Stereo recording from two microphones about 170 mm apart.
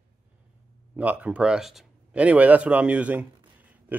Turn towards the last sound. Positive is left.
turn(degrees=-10)  # may be behind; listen again after turning